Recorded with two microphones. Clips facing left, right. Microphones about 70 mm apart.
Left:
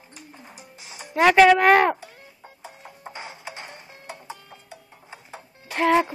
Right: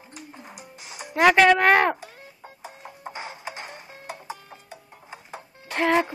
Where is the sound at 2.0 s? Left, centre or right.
Centre.